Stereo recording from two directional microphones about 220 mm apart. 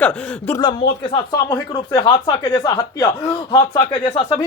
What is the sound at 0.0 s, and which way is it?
Speech, 5° left (ahead or behind).